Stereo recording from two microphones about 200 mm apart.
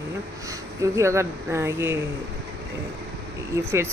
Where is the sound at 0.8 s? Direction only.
15° right (ahead or behind).